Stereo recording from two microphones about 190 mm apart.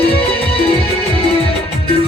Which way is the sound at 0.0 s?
30° left (ahead or behind).